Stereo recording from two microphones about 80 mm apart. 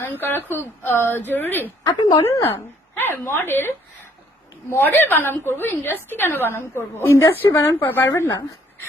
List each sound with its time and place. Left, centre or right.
0.0 s speech: left
1.9 s speech: left
2.3 s a woman's voice: left
7.9 s speech: left